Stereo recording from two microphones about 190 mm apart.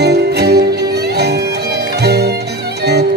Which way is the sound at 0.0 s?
60° right (ahead or behind).